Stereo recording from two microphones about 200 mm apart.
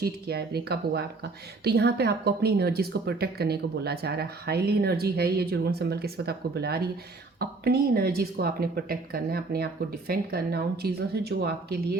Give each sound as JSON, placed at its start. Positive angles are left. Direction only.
{"t": 0.0, "sound": "speech", "side_deg": -55}